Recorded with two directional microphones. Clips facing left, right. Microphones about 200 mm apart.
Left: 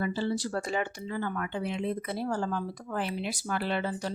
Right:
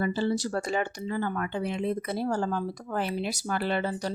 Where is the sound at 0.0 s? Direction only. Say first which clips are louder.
Right 3 dB; 45° right (ahead or behind).